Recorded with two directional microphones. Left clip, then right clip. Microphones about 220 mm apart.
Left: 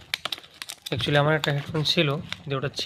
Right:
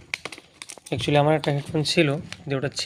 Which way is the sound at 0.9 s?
10° left (ahead or behind).